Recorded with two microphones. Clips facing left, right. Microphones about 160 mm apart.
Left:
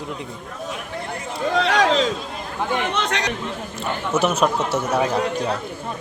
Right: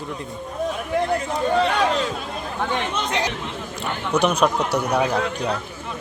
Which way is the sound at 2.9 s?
75° left (ahead or behind).